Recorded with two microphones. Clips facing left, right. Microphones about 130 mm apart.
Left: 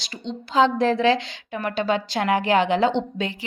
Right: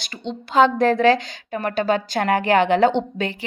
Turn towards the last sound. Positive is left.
turn(degrees=-55)  # may be behind; listen again after turning